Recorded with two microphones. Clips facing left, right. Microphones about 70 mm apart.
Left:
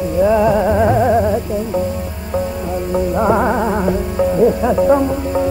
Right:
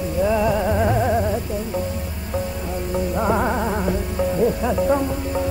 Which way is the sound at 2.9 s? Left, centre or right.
Left.